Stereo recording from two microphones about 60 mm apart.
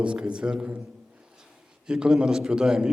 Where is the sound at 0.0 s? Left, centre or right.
Centre.